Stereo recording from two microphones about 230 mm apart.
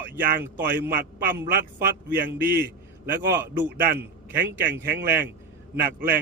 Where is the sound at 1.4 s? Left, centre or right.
Right.